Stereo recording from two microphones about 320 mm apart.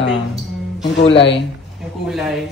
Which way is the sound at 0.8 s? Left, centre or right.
Centre.